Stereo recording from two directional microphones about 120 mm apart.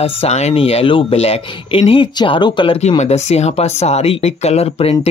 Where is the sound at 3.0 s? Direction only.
65° left (ahead or behind).